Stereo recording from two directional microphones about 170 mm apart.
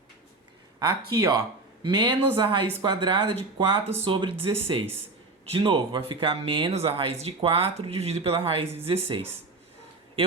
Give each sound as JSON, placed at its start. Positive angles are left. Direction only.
{"t": 1.1, "sound": "speech", "side_deg": -20}